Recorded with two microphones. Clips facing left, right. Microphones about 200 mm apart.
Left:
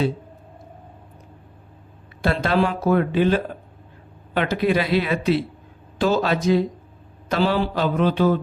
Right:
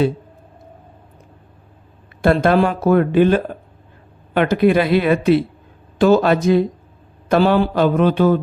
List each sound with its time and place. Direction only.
2.2 s speech: 50° right (ahead or behind)